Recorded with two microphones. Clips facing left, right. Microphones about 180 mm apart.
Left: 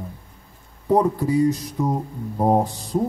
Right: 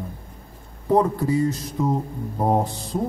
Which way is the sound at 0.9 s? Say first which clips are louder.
Left 1 dB; 15° left (ahead or behind).